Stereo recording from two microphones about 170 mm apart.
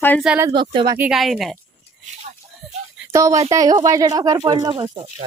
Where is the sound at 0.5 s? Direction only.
30° right (ahead or behind).